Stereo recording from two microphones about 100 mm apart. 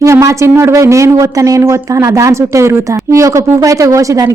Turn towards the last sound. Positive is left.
turn(degrees=-35)  # may be behind; listen again after turning